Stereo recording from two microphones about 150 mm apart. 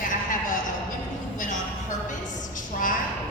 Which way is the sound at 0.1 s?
60° left (ahead or behind).